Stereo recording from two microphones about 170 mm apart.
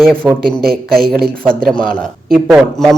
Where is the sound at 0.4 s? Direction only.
65° right (ahead or behind).